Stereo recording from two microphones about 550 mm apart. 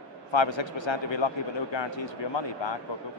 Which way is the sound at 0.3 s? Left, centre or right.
Left.